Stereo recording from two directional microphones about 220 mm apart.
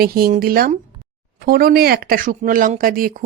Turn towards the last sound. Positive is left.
turn(degrees=-40)  # may be behind; listen again after turning